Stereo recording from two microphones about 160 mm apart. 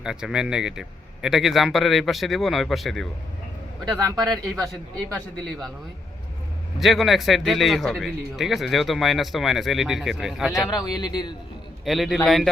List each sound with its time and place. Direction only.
0.0 s a man's voice: 5° right (ahead or behind)
4.4 s a man's voice: centre (ahead or behind)
6.7 s a man's voice: centre (ahead or behind)
10.9 s a man's voice: 25° left (ahead or behind)
11.9 s a man's voice: centre (ahead or behind)